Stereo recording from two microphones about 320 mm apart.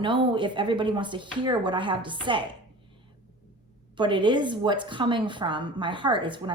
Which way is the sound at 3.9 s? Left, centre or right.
Centre.